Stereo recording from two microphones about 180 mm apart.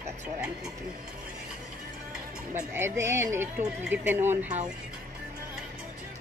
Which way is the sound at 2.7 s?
15° right (ahead or behind).